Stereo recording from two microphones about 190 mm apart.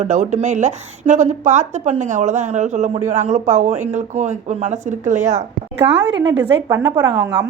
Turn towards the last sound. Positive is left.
turn(degrees=-25)  # may be behind; listen again after turning